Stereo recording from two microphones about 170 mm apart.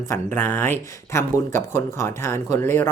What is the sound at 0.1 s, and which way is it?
Speech, 10° left (ahead or behind).